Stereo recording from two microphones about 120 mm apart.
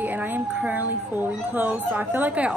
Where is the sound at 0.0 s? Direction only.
15° right (ahead or behind).